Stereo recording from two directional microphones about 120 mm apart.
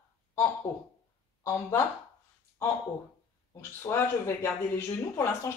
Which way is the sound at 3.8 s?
20° left (ahead or behind).